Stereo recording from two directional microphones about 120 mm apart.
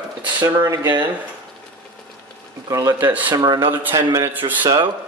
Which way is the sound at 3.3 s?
35° right (ahead or behind).